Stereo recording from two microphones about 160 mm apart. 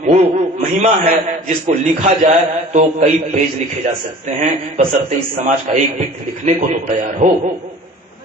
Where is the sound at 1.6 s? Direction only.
50° right (ahead or behind).